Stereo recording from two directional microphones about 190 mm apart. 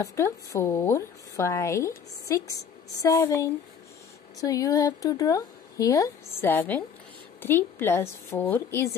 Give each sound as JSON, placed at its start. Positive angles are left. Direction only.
{"t": 0.0, "sound": "a woman's voice", "side_deg": 15}